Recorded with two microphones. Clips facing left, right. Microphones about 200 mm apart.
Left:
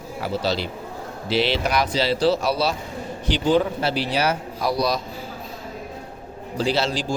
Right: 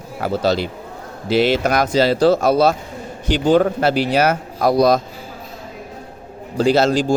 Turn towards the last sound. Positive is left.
turn(degrees=-45)  # may be behind; listen again after turning